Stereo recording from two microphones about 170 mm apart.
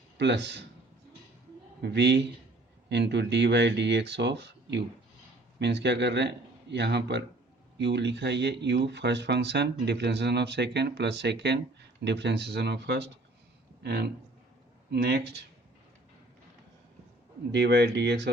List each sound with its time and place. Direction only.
0.2 s speech: 90° right
1.8 s speech: 85° right
17.5 s speech: 90° right